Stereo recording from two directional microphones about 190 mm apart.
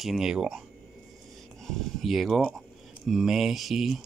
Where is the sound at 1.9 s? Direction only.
Centre (ahead or behind).